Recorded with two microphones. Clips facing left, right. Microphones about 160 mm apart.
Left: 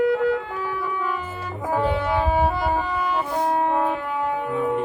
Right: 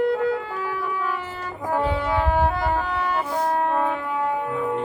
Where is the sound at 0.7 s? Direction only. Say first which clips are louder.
Even; 5° right (ahead or behind).